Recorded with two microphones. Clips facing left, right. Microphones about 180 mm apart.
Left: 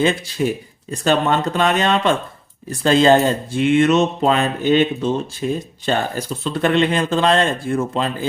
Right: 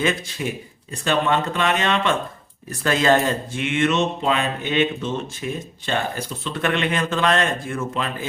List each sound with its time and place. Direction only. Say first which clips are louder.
0.4 s speech: left 7 dB; 40° left (ahead or behind)